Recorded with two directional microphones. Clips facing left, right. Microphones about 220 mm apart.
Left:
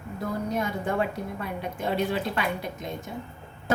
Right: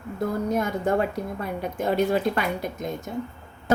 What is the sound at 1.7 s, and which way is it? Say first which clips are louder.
A woman's voice: right 5 dB; 45° right (ahead or behind).